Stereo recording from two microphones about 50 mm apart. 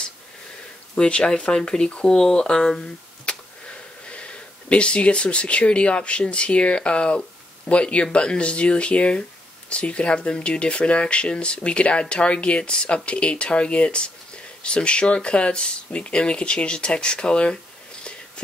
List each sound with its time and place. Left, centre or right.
0.9 s speech: centre
3.3 s a sound: left
4.1 s speech: left